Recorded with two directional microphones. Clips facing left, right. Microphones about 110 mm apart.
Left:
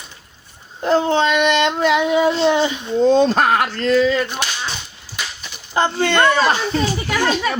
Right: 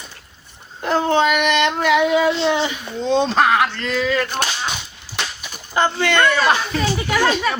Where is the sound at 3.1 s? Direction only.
45° left (ahead or behind).